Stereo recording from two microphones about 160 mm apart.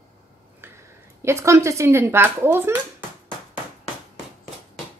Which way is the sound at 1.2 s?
15° right (ahead or behind).